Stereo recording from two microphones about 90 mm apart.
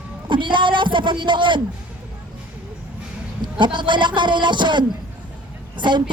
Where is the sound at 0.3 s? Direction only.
65° right (ahead or behind).